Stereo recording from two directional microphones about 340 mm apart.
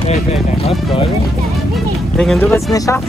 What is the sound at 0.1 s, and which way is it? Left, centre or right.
Speech, centre.